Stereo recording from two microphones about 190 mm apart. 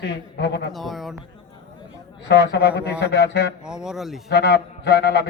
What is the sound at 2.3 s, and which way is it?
Speech, 65° left (ahead or behind).